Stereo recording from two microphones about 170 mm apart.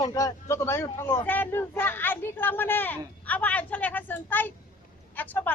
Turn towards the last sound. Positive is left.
turn(degrees=10)  # may be behind; listen again after turning